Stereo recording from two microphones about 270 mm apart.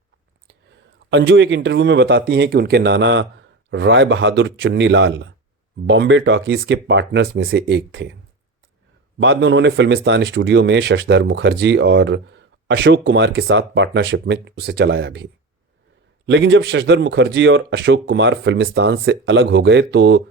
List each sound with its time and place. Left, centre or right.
1.1 s speech: right
9.1 s speech: right